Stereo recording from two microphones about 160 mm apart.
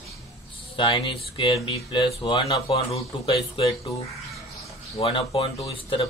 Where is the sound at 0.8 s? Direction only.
30° left (ahead or behind).